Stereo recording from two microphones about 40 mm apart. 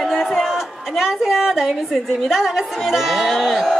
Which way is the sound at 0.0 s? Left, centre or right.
Centre.